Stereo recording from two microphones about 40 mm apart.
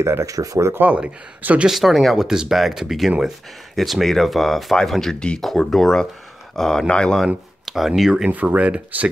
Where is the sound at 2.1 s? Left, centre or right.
Centre.